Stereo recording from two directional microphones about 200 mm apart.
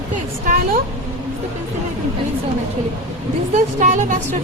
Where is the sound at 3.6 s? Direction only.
40° right (ahead or behind).